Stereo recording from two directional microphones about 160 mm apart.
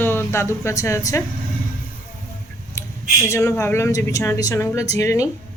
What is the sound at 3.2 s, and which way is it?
Speech, 20° left (ahead or behind).